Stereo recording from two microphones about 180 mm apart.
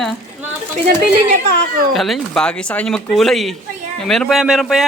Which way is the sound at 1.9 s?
Centre (ahead or behind).